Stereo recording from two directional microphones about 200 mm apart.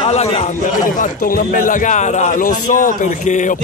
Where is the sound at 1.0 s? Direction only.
45° left (ahead or behind).